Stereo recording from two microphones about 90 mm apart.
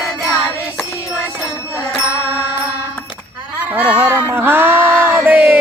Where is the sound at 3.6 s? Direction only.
15° right (ahead or behind).